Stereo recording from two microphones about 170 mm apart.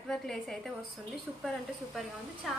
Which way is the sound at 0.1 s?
Centre (ahead or behind).